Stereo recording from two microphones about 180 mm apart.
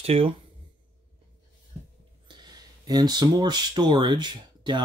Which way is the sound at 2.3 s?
25° right (ahead or behind).